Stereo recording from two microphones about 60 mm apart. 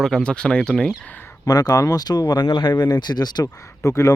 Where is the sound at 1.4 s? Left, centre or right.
Left.